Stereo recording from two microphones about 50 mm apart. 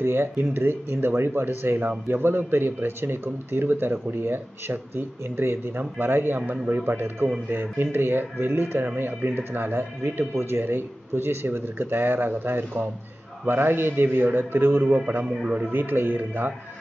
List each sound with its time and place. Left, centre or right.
0.0 s speech: right
0.4 s speech: right
14.9 s speech: right
15.7 s speech: right